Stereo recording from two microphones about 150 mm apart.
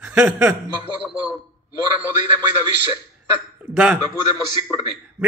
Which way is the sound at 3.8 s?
10° right (ahead or behind).